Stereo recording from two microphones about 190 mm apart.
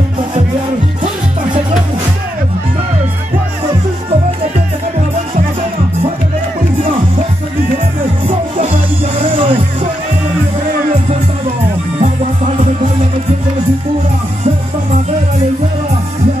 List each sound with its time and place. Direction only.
6.8 s music: 40° right (ahead or behind)
9.2 s music: 25° right (ahead or behind)
12.0 s music: 40° right (ahead or behind)